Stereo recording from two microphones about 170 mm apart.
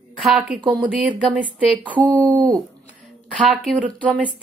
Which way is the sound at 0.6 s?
25° right (ahead or behind).